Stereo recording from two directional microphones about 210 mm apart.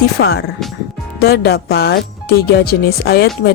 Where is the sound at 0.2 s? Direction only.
45° left (ahead or behind).